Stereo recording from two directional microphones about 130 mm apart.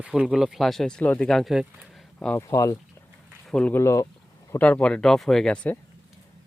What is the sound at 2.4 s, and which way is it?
Speech, 25° left (ahead or behind).